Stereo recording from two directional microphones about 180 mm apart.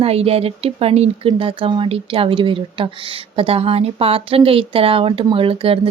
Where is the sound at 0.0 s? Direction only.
35° right (ahead or behind).